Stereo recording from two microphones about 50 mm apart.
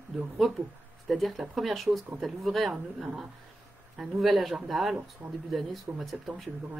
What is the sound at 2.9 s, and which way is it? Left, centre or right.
Speech, centre.